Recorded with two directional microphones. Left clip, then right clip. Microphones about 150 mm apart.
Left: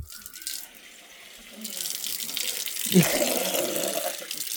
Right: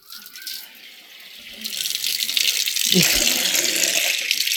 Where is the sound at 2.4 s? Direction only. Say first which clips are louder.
Right 12 dB; 15° left (ahead or behind).